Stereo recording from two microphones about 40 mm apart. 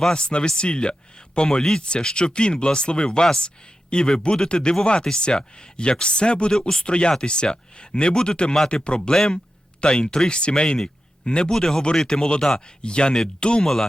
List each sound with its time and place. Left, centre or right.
0.1 s speech: left
11.5 s speech: centre
13.6 s speech: centre